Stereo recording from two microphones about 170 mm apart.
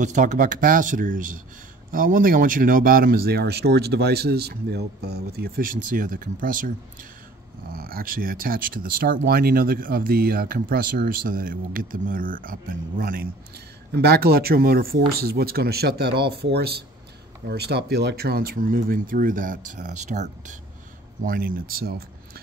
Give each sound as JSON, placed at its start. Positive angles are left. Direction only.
{"t": 0.0, "sound": "speech", "side_deg": -45}
{"t": 13.9, "sound": "speech", "side_deg": -65}
{"t": 21.2, "sound": "speech", "side_deg": -55}